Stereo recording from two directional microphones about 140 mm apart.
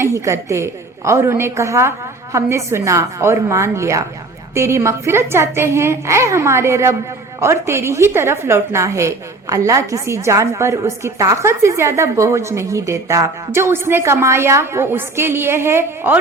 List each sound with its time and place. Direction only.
0.0 s a woman's voice: 20° right (ahead or behind)